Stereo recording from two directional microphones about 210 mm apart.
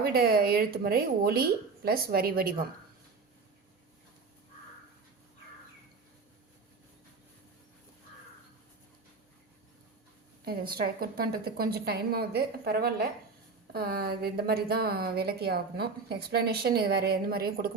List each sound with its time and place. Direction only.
0.0 s a woman's voice: 45° right (ahead or behind)
10.4 s a woman's voice: 45° right (ahead or behind)